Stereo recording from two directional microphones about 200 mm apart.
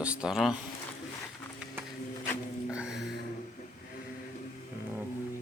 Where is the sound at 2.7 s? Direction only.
5° right (ahead or behind).